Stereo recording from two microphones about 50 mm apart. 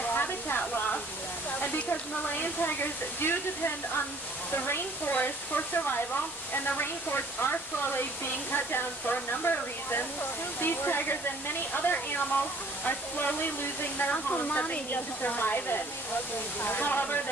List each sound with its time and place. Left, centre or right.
0.1 s a sound: left
1.6 s speech: left
9.4 s speech: left